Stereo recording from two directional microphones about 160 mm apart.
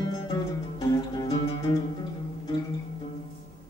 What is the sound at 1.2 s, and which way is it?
Music, 30° left (ahead or behind).